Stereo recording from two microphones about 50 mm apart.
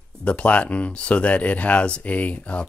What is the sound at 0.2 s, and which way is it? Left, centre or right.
Speech, left.